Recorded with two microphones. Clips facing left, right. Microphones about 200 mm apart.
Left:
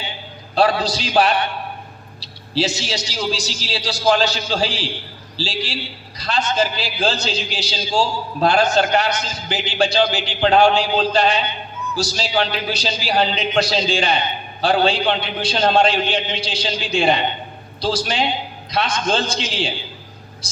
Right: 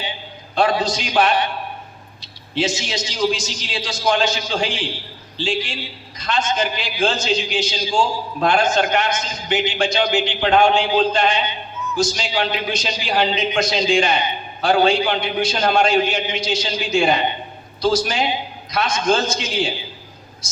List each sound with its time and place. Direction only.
0.5 s a man's voice: 35° left (ahead or behind)